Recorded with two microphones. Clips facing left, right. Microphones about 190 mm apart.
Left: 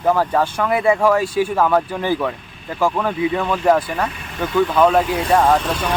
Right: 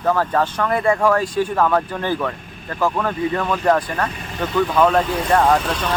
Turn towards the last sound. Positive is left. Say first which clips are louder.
# left 1 dB
turn(degrees=10)  # may be behind; listen again after turning